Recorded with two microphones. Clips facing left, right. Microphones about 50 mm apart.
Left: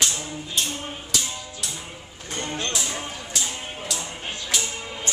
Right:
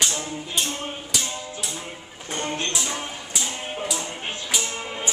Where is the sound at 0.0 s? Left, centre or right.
Centre.